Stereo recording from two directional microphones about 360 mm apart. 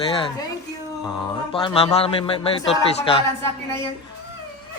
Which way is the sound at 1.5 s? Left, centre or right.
Centre.